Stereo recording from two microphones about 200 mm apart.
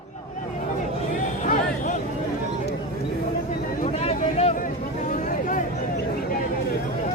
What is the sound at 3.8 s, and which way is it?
Vehicle, 30° left (ahead or behind).